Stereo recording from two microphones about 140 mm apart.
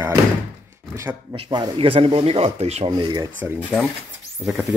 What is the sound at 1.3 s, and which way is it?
Speech, 35° right (ahead or behind).